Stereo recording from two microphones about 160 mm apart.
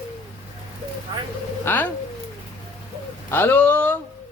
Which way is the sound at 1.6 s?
10° left (ahead or behind).